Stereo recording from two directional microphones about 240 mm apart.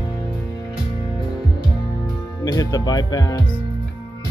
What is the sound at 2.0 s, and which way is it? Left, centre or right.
Music, centre.